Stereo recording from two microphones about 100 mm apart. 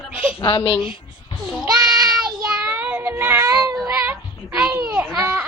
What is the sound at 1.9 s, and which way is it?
Child singing, 5° right (ahead or behind).